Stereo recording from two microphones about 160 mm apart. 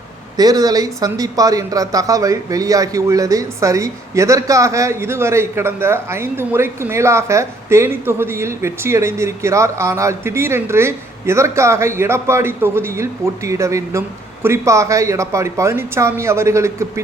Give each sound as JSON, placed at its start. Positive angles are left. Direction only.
{"t": 0.3, "sound": "speech", "side_deg": -25}